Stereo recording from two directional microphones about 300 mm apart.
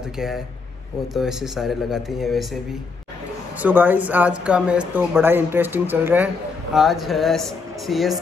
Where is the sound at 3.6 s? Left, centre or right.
Centre.